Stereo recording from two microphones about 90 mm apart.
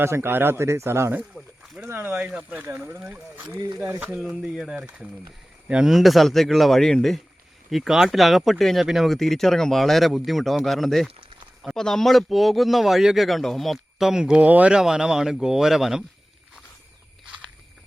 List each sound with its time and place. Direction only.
0.0 s speech: 30° right (ahead or behind)
1.6 s a sound: 5° right (ahead or behind)
1.9 s speech: 20° right (ahead or behind)
4.2 s speech: 5° right (ahead or behind)
5.9 s speech: centre (ahead or behind)